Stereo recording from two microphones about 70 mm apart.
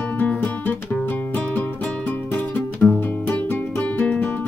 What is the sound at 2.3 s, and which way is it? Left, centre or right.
Music, left.